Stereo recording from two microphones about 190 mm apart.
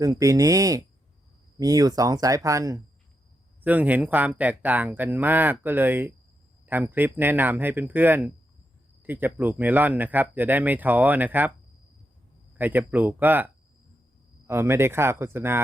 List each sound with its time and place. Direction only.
0.0 s speech: 15° right (ahead or behind)
12.5 s speech: 10° right (ahead or behind)